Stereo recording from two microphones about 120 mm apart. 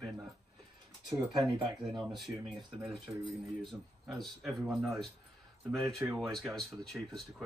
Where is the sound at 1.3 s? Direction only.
35° right (ahead or behind).